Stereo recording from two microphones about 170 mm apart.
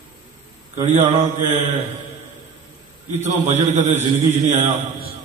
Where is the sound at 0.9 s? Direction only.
45° right (ahead or behind).